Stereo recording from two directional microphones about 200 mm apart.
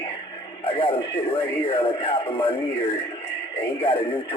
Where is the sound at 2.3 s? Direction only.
25° left (ahead or behind).